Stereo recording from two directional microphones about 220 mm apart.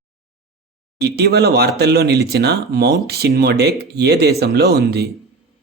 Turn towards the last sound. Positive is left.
turn(degrees=-45)  # may be behind; listen again after turning